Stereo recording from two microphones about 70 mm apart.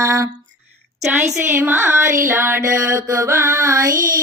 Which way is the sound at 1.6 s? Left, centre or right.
Right.